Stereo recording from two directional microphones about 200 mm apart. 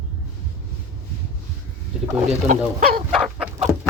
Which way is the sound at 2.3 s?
35° right (ahead or behind).